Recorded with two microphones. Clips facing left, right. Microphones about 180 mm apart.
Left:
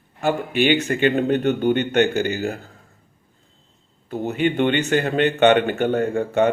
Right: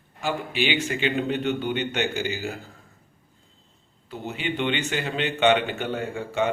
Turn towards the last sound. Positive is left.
turn(degrees=55)  # may be behind; listen again after turning